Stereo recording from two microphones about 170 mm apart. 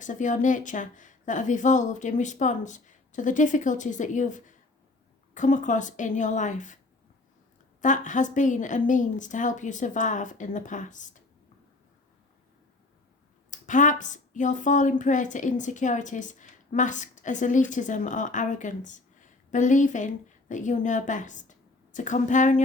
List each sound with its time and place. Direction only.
0.0 s speech: 50° left (ahead or behind)
7.8 s speech: 50° left (ahead or behind)
13.5 s speech: 50° left (ahead or behind)